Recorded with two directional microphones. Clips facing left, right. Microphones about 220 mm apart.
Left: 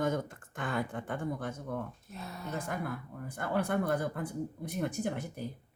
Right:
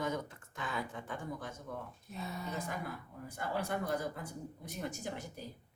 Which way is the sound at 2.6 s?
55° left (ahead or behind).